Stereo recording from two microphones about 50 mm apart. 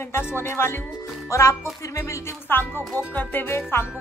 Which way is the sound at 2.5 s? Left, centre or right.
Left.